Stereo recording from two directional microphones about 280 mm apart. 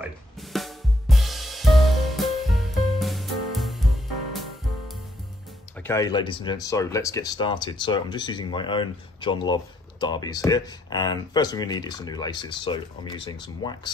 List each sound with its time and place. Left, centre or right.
0.4 s drum kit: centre
5.8 s speech: centre